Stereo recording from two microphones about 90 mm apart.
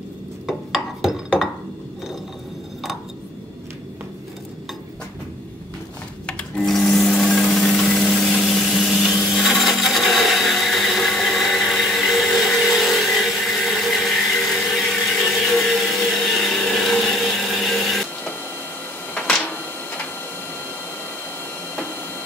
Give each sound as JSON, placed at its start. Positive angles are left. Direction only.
{"t": 0.5, "sound": "a sound", "side_deg": 0}
{"t": 6.6, "sound": "sewing machine", "side_deg": 0}
{"t": 8.2, "sound": "wood", "side_deg": 0}
{"t": 19.1, "sound": "printer", "side_deg": 15}